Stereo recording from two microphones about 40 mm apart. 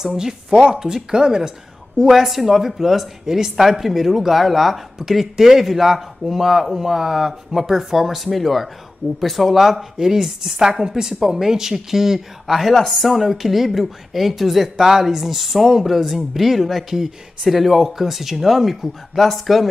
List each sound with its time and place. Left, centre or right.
0.1 s speech: centre
2.0 s speech: centre